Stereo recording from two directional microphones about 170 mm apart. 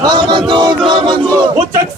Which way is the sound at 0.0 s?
25° right (ahead or behind).